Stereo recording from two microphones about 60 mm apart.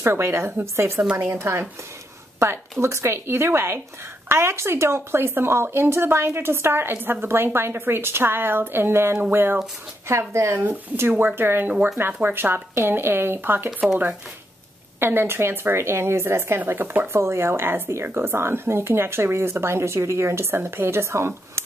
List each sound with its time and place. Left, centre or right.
0.0 s a woman's voice: right
10.0 s speech: right
10.6 s speech: right
15.0 s speech: right
17.1 s speech: right